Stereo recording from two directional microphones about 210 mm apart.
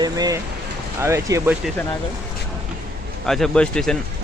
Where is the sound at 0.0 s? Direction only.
20° right (ahead or behind).